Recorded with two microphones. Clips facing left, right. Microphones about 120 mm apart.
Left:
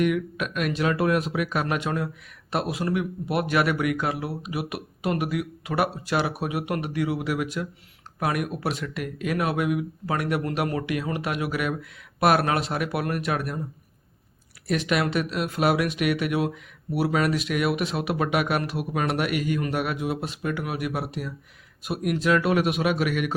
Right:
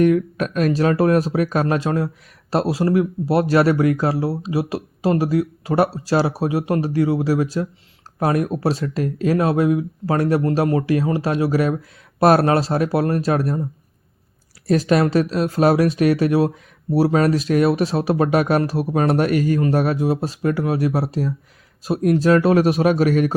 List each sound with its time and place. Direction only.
0.0 s speech: 35° right (ahead or behind)
14.7 s speech: 35° right (ahead or behind)